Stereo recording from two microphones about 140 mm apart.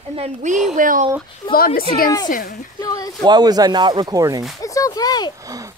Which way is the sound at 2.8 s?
25° left (ahead or behind).